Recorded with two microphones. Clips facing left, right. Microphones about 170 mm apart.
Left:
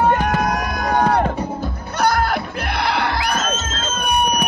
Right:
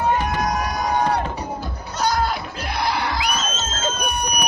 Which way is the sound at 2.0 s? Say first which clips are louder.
Left 3 dB; 60° left (ahead or behind).